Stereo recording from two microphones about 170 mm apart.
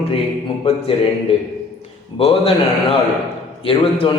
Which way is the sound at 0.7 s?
35° left (ahead or behind).